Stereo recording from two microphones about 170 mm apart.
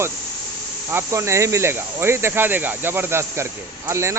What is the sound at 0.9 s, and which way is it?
Speech, 15° right (ahead or behind).